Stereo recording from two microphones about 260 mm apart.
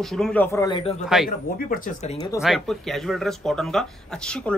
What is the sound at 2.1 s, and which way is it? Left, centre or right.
Speech, centre.